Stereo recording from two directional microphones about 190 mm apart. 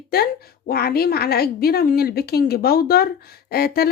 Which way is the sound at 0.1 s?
55° left (ahead or behind).